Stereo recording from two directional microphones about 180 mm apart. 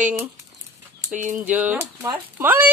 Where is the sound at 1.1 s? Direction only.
45° right (ahead or behind).